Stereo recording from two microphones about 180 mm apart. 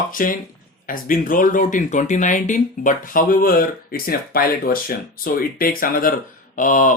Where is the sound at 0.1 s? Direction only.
50° left (ahead or behind).